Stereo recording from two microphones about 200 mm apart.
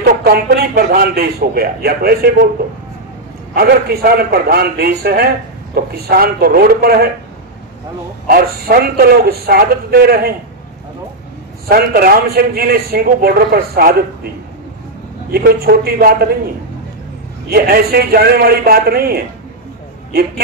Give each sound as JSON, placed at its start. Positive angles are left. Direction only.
{"t": 0.0, "sound": "a man's voice", "side_deg": -50}
{"t": 3.5, "sound": "a man's voice", "side_deg": -50}
{"t": 8.3, "sound": "a man's voice", "side_deg": -50}
{"t": 11.6, "sound": "a man's voice", "side_deg": -50}
{"t": 15.3, "sound": "a man's voice", "side_deg": -50}
{"t": 17.5, "sound": "a man's voice", "side_deg": -50}